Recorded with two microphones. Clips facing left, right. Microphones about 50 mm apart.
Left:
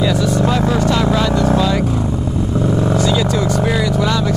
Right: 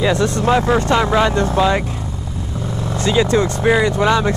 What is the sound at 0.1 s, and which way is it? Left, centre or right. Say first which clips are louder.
Speech: even; right.